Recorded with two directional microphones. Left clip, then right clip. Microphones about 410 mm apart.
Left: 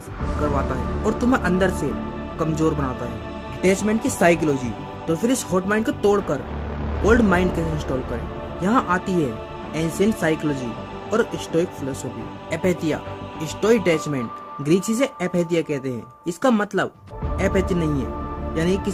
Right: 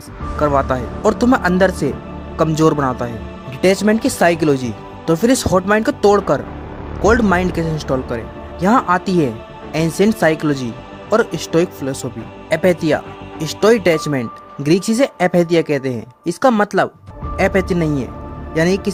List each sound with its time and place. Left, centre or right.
0.5 s a man's voice: centre